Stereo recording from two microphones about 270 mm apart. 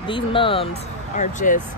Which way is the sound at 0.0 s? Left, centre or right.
Centre.